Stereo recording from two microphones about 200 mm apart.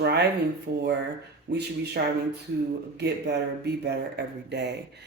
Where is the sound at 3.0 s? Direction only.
55° right (ahead or behind).